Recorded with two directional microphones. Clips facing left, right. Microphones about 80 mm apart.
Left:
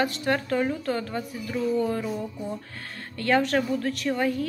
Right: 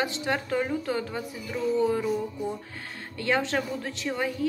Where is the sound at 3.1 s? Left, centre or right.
Centre.